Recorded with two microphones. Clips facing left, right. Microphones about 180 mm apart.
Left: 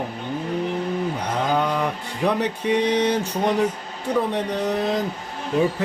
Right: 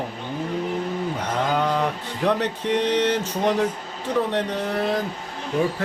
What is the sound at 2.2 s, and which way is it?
Speech, 10° left (ahead or behind).